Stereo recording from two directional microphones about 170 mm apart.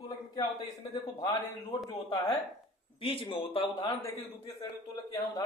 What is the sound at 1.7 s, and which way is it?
Speech, 25° left (ahead or behind).